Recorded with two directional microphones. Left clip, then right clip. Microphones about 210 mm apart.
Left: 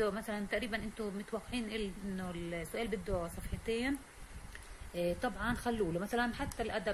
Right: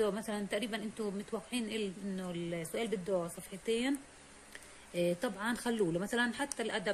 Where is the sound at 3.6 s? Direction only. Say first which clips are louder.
Right 2 dB; 40° right (ahead or behind).